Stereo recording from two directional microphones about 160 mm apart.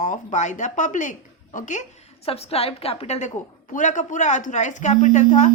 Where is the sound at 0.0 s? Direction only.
50° left (ahead or behind).